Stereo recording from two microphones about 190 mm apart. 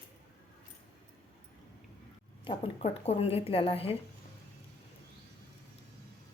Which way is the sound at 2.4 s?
30° left (ahead or behind).